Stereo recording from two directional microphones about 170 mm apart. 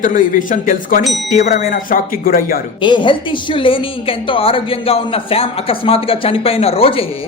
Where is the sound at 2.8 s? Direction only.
30° left (ahead or behind).